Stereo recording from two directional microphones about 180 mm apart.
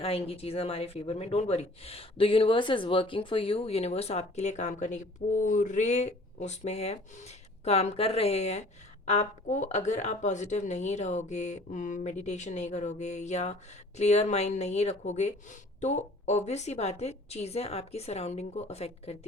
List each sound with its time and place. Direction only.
0.0 s speech: 30° left (ahead or behind)